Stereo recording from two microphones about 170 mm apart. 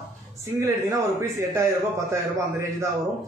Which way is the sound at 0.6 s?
15° right (ahead or behind).